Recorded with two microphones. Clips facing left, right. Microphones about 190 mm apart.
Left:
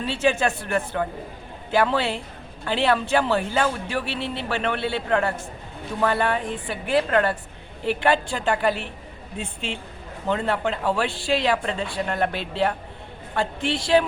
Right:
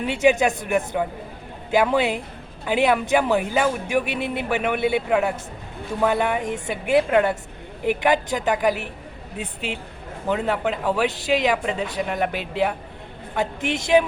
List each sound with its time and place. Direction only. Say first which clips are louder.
0.0 s a woman's voice: right 4 dB; 20° right (ahead or behind)
1.7 s a woman's voice: right 2 dB; 15° right (ahead or behind)
10.2 s speech: right 1 dB; 10° right (ahead or behind)